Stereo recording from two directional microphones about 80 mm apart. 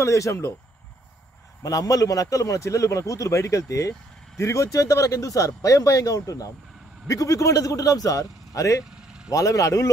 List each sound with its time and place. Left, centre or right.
0.0 s speech: left
1.6 s a man's voice: left